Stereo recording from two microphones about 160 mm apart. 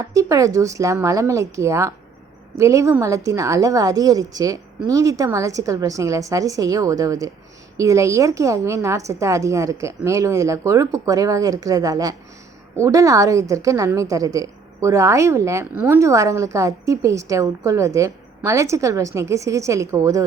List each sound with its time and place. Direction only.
0.0 s a woman's voice: 20° right (ahead or behind)